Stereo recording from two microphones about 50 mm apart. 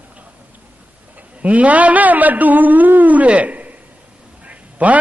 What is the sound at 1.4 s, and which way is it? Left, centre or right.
A woman's voice, right.